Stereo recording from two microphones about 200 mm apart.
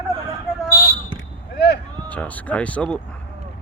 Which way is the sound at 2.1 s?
10° left (ahead or behind).